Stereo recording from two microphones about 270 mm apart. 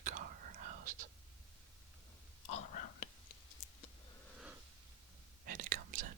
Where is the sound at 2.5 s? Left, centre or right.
Left.